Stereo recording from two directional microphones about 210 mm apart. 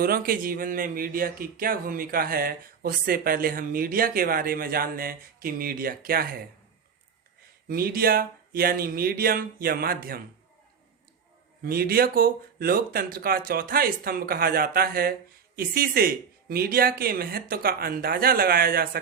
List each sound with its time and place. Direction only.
0.0 s speech: 45° right (ahead or behind)
7.7 s speech: 45° right (ahead or behind)
11.6 s speech: 45° right (ahead or behind)